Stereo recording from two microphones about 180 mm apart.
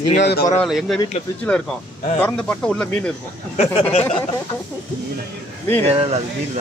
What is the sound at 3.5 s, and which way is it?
Speech, 35° left (ahead or behind).